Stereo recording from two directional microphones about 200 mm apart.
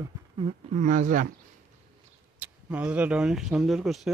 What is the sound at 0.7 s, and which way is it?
Speech, 40° right (ahead or behind).